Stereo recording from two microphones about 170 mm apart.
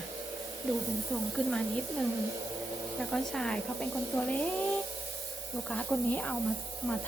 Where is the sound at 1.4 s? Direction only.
5° left (ahead or behind).